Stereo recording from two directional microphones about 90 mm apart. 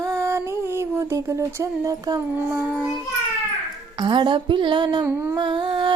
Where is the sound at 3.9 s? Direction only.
55° right (ahead or behind).